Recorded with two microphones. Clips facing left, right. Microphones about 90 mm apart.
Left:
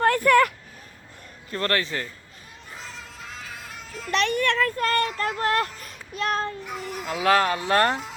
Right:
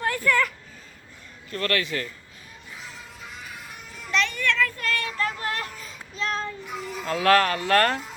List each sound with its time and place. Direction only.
0.0 s speech: 60° left (ahead or behind)
1.5 s a man's voice: 35° left (ahead or behind)
3.2 s music: 90° left; by 5.3 s 40° left (ahead or behind)
5.4 s speech: 60° left (ahead or behind)
7.0 s speech: 15° left (ahead or behind)